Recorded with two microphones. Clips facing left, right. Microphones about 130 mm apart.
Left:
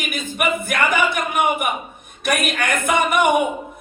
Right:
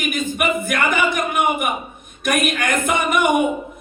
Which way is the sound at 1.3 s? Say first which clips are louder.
Even; 50° right (ahead or behind).